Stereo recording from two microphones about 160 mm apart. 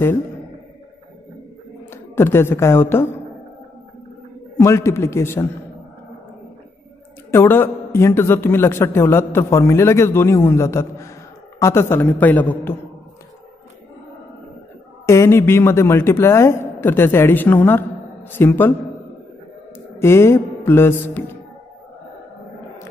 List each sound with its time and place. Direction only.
1.9 s a woman's voice: 15° left (ahead or behind)
4.6 s a man's voice: 15° left (ahead or behind)
7.2 s a man's voice: 15° left (ahead or behind)
15.0 s a man's voice: 15° left (ahead or behind)
20.0 s a man's voice: 15° left (ahead or behind)